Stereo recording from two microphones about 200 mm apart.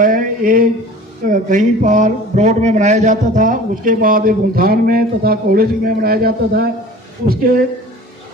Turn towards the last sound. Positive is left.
turn(degrees=-45)  # may be behind; listen again after turning